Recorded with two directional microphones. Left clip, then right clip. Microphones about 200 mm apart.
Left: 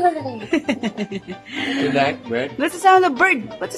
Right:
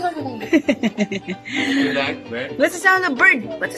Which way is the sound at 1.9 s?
50° left (ahead or behind).